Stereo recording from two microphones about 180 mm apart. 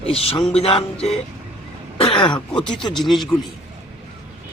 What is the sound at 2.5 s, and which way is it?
Speech, 5° left (ahead or behind).